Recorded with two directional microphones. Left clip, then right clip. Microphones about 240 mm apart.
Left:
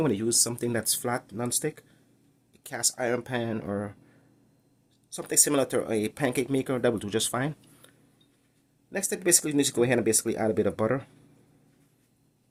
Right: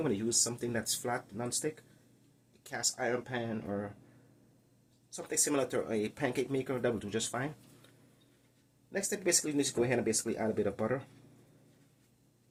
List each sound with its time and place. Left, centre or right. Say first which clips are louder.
0.0 s speech: left 6 dB; left
5.1 s speech: left 7 dB; left
8.9 s speech: left 6 dB; left